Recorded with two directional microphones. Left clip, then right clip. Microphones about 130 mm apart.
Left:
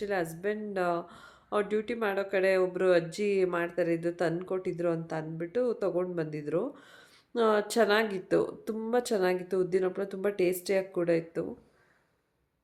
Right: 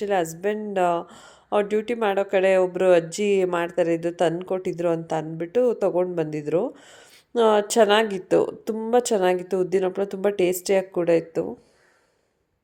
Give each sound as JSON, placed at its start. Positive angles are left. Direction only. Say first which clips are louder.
{"t": 0.0, "sound": "speech", "louder": "right 8 dB", "side_deg": -25}